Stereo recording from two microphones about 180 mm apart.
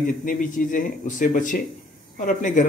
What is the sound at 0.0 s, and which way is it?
A man's voice, 50° left (ahead or behind).